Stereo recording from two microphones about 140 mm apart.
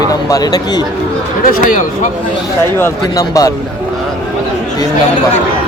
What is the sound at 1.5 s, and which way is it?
Speech, 70° left (ahead or behind).